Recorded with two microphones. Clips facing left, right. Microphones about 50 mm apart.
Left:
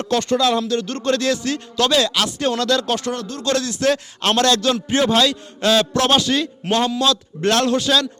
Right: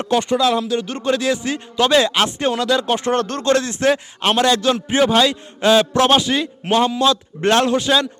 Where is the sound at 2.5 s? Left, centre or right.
Centre.